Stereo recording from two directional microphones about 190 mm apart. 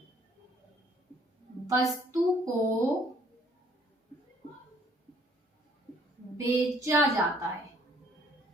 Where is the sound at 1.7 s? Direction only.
15° right (ahead or behind).